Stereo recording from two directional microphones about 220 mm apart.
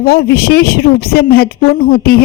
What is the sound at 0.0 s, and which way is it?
A woman's voice, 45° left (ahead or behind).